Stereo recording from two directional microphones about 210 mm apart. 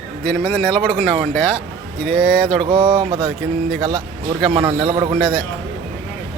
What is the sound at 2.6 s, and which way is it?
Speech, 25° right (ahead or behind).